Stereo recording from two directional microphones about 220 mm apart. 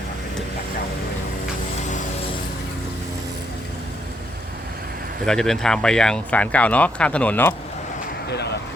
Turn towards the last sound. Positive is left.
turn(degrees=10)  # may be behind; listen again after turning